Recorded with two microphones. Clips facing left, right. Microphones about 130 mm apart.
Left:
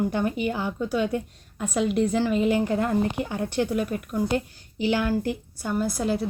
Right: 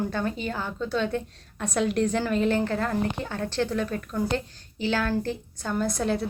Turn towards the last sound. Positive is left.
turn(degrees=5)  # may be behind; listen again after turning